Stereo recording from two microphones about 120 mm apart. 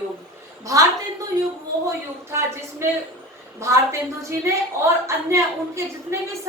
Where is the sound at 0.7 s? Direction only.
25° right (ahead or behind).